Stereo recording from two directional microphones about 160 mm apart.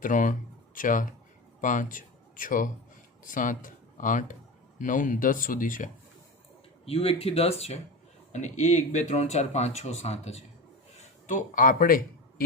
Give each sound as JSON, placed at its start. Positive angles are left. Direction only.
{"t": 0.0, "sound": "speech", "side_deg": 55}
{"t": 6.8, "sound": "speech", "side_deg": 40}